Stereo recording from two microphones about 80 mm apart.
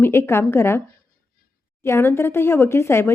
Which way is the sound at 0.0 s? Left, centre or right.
Left.